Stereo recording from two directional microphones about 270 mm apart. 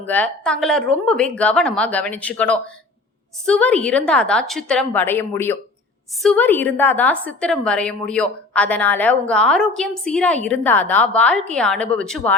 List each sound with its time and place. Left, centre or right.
0.0 s a woman's voice: centre